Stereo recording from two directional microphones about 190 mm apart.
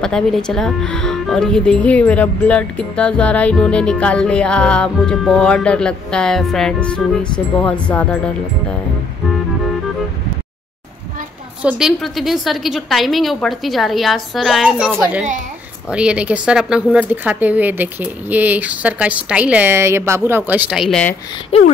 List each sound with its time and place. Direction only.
0.0 s speech: 5° left (ahead or behind)
11.6 s speech: centre (ahead or behind)
21.5 s speech: 35° left (ahead or behind)